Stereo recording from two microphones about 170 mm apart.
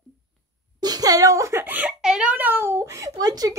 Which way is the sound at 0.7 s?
25° right (ahead or behind).